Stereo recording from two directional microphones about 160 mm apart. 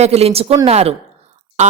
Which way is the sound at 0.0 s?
40° right (ahead or behind).